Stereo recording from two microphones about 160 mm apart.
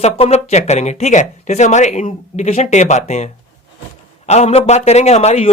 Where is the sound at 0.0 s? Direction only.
45° left (ahead or behind).